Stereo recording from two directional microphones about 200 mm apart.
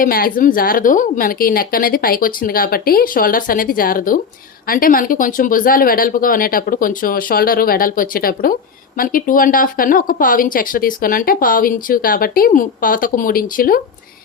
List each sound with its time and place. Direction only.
0.0 s a woman's voice: 45° left (ahead or behind)